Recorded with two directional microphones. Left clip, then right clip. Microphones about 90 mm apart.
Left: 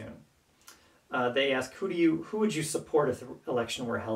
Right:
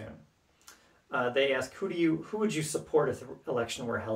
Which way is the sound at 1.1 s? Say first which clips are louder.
Even; 20° right (ahead or behind).